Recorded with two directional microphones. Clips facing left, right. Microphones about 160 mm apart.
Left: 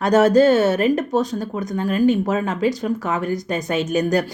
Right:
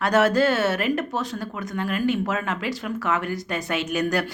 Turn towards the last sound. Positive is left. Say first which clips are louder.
# left 5 dB
turn(degrees=40)  # may be behind; listen again after turning